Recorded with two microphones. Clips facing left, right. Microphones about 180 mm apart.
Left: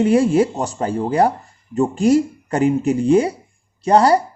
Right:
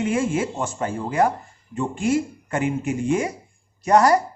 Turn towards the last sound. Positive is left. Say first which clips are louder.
# left 3 dB
turn(degrees=30)  # may be behind; listen again after turning